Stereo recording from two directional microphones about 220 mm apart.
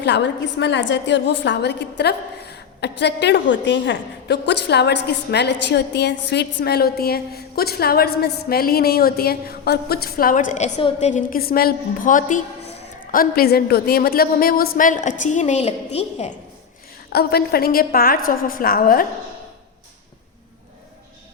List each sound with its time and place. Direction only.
0.0 s a woman's voice: 50° left (ahead or behind); by 16.3 s 30° left (ahead or behind)
17.1 s a woman's voice: 45° left (ahead or behind)